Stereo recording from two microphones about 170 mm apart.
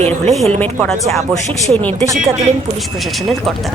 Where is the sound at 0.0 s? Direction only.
35° right (ahead or behind).